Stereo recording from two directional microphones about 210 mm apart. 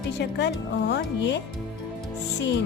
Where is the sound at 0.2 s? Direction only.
55° left (ahead or behind).